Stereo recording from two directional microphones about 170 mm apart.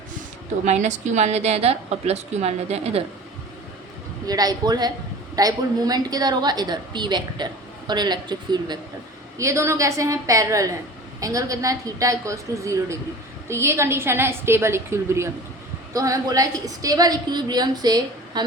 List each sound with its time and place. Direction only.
0.6 s a woman's voice: 45° right (ahead or behind)
4.3 s a woman's voice: 20° right (ahead or behind)